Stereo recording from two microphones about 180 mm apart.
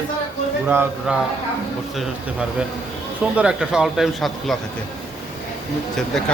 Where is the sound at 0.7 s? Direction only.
10° right (ahead or behind).